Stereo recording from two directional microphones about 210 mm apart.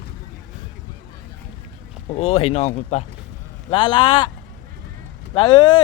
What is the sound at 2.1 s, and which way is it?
Speech, 25° left (ahead or behind).